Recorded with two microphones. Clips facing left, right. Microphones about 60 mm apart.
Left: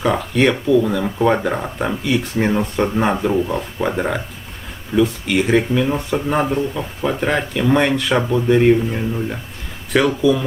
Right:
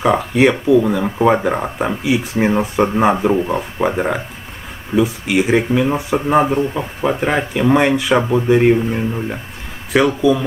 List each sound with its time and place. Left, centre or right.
0.0 s speech: centre
3.4 s speech: right
3.8 s speech: centre